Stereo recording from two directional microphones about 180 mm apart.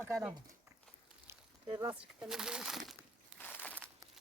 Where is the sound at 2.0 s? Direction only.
5° right (ahead or behind).